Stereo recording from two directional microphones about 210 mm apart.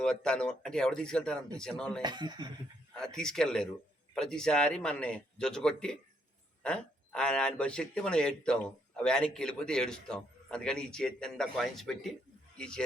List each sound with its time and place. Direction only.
0.0 s speech: 5° left (ahead or behind)
2.0 s speech: 20° right (ahead or behind)
2.9 s speech: 5° left (ahead or behind)